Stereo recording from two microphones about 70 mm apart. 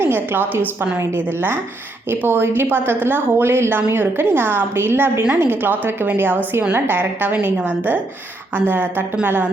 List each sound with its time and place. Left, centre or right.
0.0 s a woman's voice: right